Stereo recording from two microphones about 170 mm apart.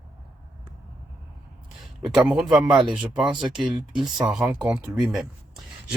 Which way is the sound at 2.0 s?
5° right (ahead or behind).